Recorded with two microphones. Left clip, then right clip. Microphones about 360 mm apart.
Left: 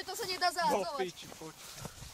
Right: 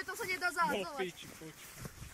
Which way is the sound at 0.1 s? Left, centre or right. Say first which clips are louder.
Left 4 dB; left.